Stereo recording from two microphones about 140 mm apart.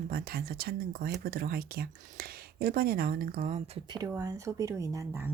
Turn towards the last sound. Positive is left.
turn(degrees=-15)  # may be behind; listen again after turning